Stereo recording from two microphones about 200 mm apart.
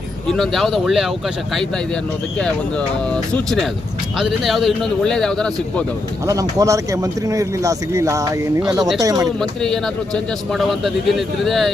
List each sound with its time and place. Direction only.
0.3 s a man's voice: centre (ahead or behind)
2.4 s a man's voice: 5° left (ahead or behind)
6.2 s speech: 15° right (ahead or behind)
9.4 s a man's voice: 5° left (ahead or behind)